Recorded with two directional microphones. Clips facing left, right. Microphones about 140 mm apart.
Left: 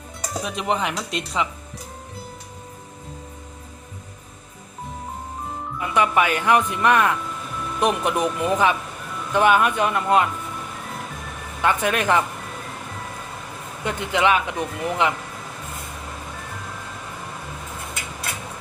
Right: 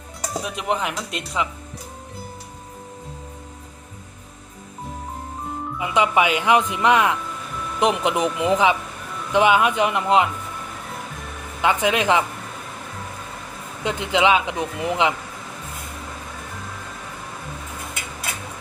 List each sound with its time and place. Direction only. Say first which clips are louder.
0.3 s speech: left 1 dB; 5° right (ahead or behind)
5.8 s speech: right 1 dB; 20° right (ahead or behind)
11.6 s speech: right 1 dB; 15° right (ahead or behind)
13.8 s a man's voice: right 2 dB; 20° right (ahead or behind)